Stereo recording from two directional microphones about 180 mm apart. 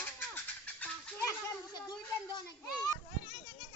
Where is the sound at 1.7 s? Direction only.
20° left (ahead or behind).